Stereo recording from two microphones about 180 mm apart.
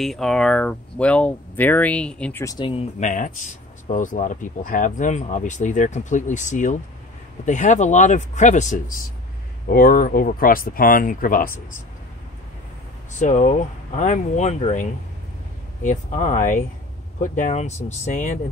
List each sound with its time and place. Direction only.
0.0 s speech: centre (ahead or behind)
2.4 s speech: 25° left (ahead or behind); by 11.5 s 50° left (ahead or behind)
13.2 s speech: 40° left (ahead or behind)